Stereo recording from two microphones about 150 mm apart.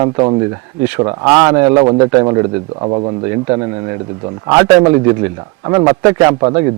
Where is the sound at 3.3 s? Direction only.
25° right (ahead or behind).